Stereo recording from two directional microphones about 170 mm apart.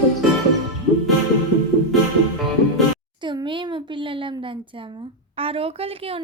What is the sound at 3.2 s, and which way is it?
Speech, 25° right (ahead or behind).